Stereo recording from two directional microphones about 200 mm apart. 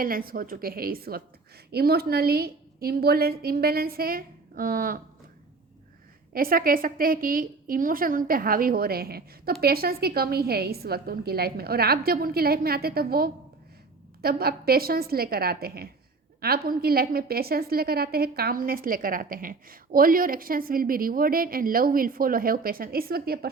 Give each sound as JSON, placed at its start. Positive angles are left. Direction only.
{"t": 0.0, "sound": "a woman's voice", "side_deg": -45}
{"t": 6.3, "sound": "a woman's voice", "side_deg": -45}